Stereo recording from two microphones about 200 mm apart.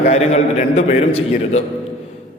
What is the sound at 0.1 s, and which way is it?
A man's voice, 35° left (ahead or behind).